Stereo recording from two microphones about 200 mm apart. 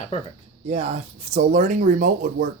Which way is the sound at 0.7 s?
30° right (ahead or behind).